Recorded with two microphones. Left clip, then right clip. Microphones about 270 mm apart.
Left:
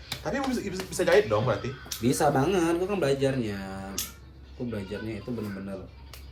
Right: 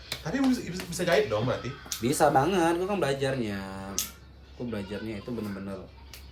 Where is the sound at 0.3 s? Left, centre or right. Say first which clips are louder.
Right 1 dB; centre.